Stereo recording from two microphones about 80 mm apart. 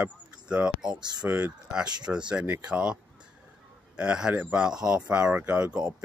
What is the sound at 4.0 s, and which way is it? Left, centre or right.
Speech, centre.